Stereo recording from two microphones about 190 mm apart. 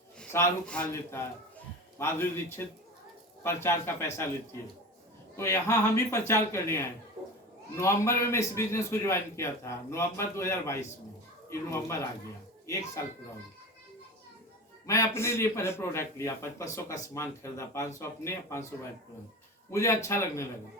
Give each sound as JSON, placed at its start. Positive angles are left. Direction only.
{"t": 0.2, "sound": "a man's voice", "side_deg": 10}
{"t": 5.4, "sound": "a man's voice", "side_deg": 15}
{"t": 14.8, "sound": "a man's voice", "side_deg": 15}
{"t": 19.7, "sound": "a man's voice", "side_deg": 15}